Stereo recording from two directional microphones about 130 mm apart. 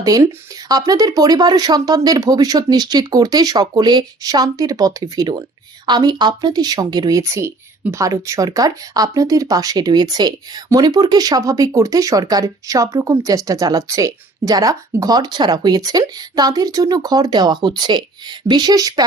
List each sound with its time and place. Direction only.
0.0 s speech: 25° right (ahead or behind)